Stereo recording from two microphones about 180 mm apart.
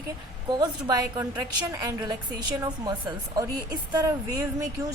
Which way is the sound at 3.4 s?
20° right (ahead or behind).